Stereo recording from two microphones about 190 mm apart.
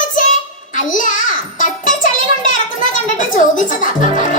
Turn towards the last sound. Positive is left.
turn(degrees=40)  # may be behind; listen again after turning